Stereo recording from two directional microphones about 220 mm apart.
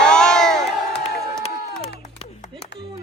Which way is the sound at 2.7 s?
55° left (ahead or behind).